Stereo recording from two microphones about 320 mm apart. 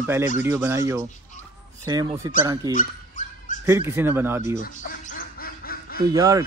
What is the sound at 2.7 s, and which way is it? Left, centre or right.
Dog, left.